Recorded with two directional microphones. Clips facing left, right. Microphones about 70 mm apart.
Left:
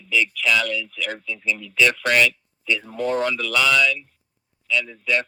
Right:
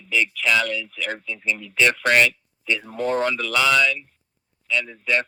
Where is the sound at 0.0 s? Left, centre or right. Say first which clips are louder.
Left 1 dB; right.